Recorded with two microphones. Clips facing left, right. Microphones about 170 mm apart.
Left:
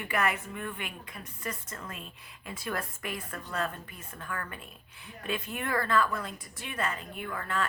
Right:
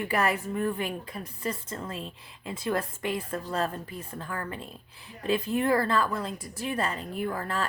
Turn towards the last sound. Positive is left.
turn(degrees=-35)  # may be behind; listen again after turning